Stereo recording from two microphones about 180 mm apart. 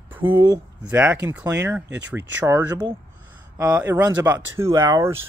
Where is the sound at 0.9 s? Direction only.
10° right (ahead or behind).